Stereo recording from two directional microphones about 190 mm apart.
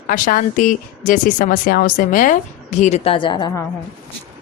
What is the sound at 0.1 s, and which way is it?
Speech, 45° left (ahead or behind).